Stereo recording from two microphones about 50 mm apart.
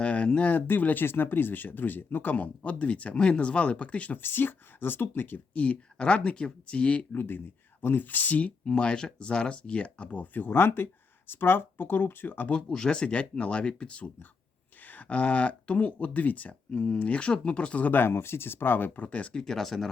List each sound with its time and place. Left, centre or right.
0.0 s speech: left
4.1 s speech: left
5.5 s speech: left
7.1 s speech: left
8.6 s speech: centre
10.3 s speech: left
12.6 s speech: centre
17.9 s speech: left
18.9 s speech: left
19.3 s speech: centre